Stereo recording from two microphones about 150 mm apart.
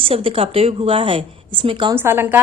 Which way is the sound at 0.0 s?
40° right (ahead or behind).